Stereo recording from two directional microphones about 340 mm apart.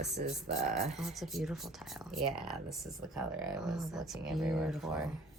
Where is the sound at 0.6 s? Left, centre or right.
Centre.